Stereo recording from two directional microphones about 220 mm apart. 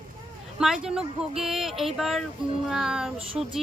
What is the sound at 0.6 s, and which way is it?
Speech, 5° right (ahead or behind).